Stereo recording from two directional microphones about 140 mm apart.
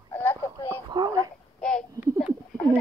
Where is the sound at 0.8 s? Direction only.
30° right (ahead or behind).